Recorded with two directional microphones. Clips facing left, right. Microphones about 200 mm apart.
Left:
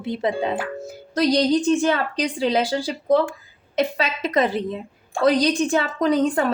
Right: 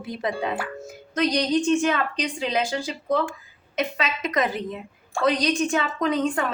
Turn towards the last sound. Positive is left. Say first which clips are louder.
# left 4 dB
turn(degrees=35)  # may be behind; listen again after turning